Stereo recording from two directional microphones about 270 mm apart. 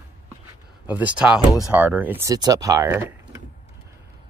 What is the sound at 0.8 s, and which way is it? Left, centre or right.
Speech, centre.